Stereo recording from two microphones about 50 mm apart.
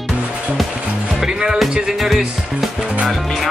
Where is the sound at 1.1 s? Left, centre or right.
Centre.